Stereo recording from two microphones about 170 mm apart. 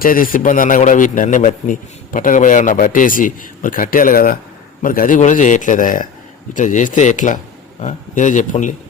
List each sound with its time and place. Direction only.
0.0 s a man's voice: 55° left (ahead or behind)